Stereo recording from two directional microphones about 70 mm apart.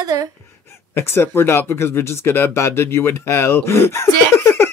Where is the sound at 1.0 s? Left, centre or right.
Left.